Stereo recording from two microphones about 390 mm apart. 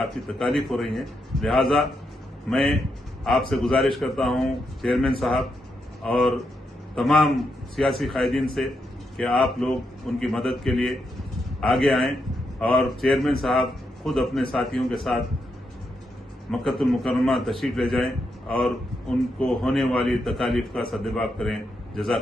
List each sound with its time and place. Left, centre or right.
0.0 s a man's voice: centre
16.5 s a man's voice: centre